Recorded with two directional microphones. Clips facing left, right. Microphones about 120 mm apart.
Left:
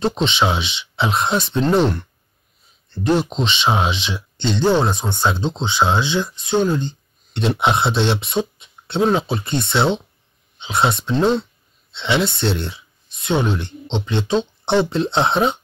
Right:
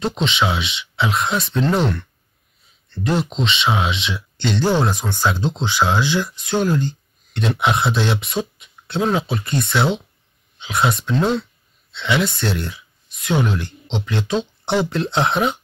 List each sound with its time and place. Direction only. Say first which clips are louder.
0.0 s speech: left 2 dB; 30° left (ahead or behind)
4.4 s speech: left 2 dB; 20° left (ahead or behind)